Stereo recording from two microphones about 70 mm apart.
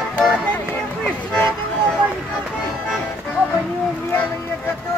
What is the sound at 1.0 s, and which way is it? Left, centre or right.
Vehicle, centre.